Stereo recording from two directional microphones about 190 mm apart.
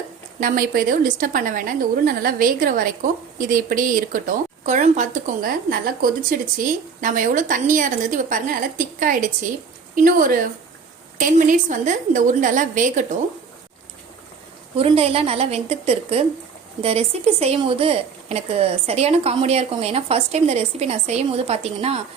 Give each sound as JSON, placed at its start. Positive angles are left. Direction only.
{"t": 0.3, "sound": "a woman's voice", "side_deg": -45}
{"t": 14.8, "sound": "a woman's voice", "side_deg": -30}